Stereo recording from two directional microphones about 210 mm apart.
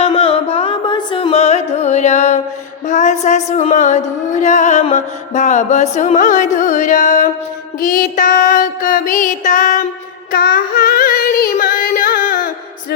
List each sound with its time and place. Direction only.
0.0 s music: 25° left (ahead or behind)
10.3 s child singing: 45° left (ahead or behind)
11.5 s music: 40° left (ahead or behind)